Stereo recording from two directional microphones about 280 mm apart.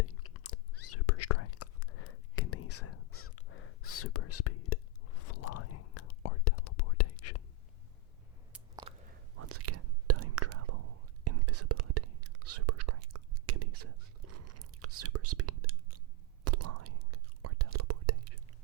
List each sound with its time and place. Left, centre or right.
0.0 s chewing: left
0.9 s whispering: left
8.5 s biting: centre
9.4 s whispering: right